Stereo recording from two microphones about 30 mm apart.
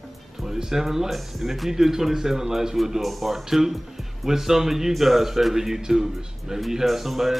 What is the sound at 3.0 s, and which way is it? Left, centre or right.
Speech, centre.